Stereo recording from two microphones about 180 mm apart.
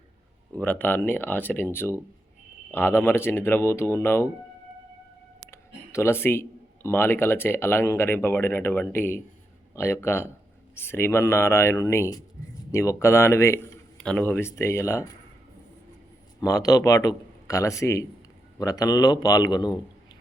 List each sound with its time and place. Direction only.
0.5 s speech: 10° left (ahead or behind)
5.5 s speech: 15° left (ahead or behind)
16.4 s a man's voice: 20° left (ahead or behind)